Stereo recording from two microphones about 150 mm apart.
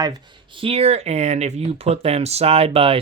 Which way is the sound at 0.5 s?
40° right (ahead or behind).